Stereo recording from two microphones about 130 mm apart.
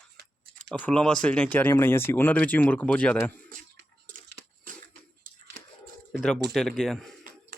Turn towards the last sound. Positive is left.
turn(degrees=5)  # may be behind; listen again after turning